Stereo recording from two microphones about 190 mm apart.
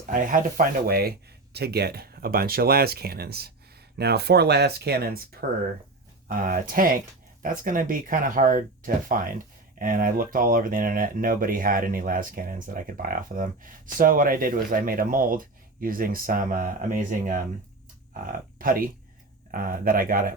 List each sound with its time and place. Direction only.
0.1 s speech: 45° right (ahead or behind)